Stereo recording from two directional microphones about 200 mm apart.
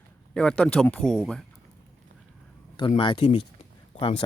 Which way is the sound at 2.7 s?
25° left (ahead or behind).